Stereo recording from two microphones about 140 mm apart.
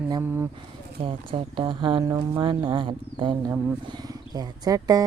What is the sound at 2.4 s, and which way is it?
Speech, 35° right (ahead or behind).